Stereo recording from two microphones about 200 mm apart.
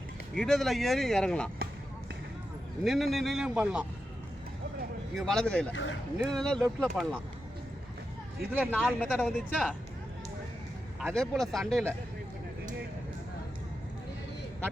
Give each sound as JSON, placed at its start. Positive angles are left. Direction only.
{"t": 0.3, "sound": "speech", "side_deg": 0}
{"t": 2.8, "sound": "speech", "side_deg": 0}
{"t": 5.1, "sound": "speech", "side_deg": 0}
{"t": 8.5, "sound": "speech", "side_deg": -5}
{"t": 11.1, "sound": "speech", "side_deg": 0}